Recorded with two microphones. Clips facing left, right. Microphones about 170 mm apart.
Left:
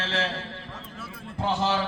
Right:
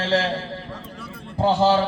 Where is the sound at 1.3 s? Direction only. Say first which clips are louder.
Right 8 dB; 35° right (ahead or behind).